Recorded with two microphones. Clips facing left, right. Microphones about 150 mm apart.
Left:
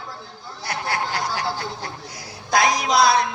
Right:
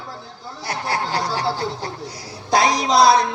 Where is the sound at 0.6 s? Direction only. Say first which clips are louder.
Right 2 dB; 35° right (ahead or behind).